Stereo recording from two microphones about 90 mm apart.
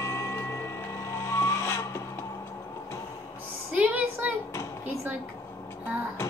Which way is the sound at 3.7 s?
15° right (ahead or behind).